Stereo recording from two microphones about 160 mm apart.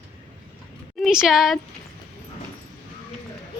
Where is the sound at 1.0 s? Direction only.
5° right (ahead or behind).